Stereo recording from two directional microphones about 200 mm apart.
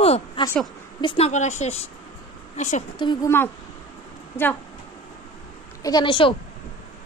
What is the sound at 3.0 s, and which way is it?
Speech, 20° left (ahead or behind).